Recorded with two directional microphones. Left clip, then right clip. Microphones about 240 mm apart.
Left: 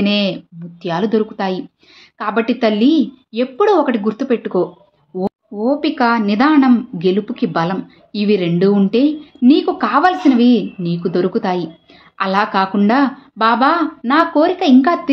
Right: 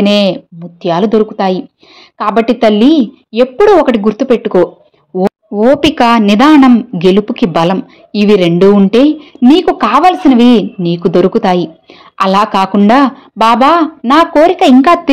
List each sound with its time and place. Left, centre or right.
0.0 s a woman's voice: right